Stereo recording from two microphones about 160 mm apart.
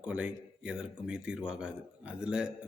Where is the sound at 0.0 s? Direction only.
10° right (ahead or behind).